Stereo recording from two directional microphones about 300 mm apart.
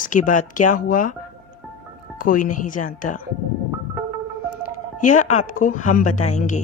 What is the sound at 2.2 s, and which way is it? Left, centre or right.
A woman's voice, left.